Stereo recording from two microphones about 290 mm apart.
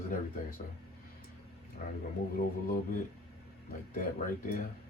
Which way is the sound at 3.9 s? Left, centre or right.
Left.